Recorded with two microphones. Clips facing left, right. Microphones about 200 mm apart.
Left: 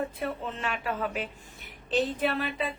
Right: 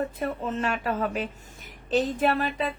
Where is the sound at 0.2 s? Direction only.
45° right (ahead or behind).